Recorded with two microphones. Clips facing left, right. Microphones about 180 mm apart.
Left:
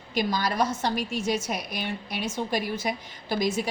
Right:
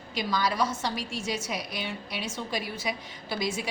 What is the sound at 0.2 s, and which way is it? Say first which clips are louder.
A woman's voice: left 2 dB; 50° left (ahead or behind).